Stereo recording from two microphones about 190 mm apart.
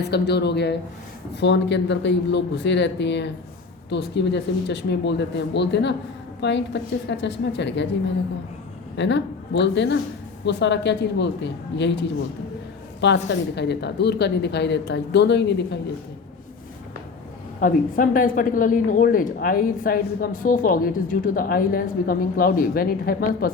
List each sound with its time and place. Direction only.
0.0 s a woman's voice: 60° left (ahead or behind)
9.0 s speech: 70° left (ahead or behind)
13.0 s a woman's voice: 65° left (ahead or behind)
17.6 s a woman's voice: 45° left (ahead or behind)